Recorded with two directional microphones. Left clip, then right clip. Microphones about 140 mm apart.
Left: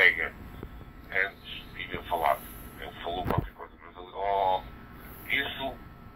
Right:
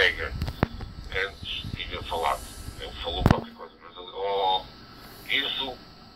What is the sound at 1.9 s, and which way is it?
Radio, 60° left (ahead or behind).